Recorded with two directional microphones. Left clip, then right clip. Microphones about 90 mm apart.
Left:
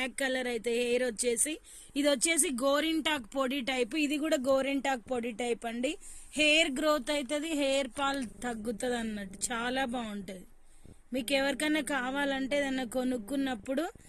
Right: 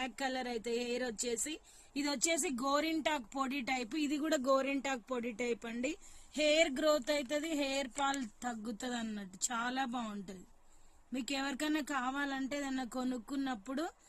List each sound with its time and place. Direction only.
0.0 s speech: 60° left (ahead or behind); by 13.9 s 35° left (ahead or behind)